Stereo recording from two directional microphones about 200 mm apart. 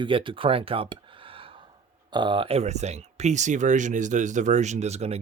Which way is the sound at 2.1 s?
25° right (ahead or behind).